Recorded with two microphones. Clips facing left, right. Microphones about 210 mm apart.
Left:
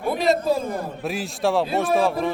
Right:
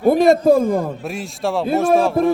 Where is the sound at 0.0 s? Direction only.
50° right (ahead or behind).